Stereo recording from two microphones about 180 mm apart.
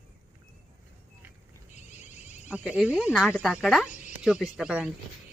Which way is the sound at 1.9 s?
40° left (ahead or behind).